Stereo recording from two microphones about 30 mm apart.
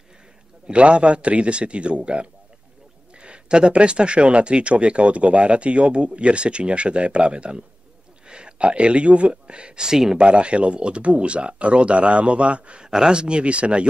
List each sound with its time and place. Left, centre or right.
0.7 s speech: right
9.8 s speech: centre
10.1 s speech: right
12.8 s speech: right
13.2 s speech: right